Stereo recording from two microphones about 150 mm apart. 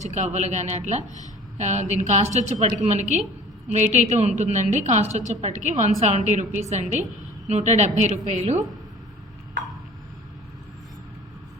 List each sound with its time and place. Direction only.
0.0 s a woman's voice: 50° right (ahead or behind)